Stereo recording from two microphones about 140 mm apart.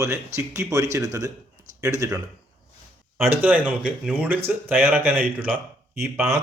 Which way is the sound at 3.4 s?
10° right (ahead or behind).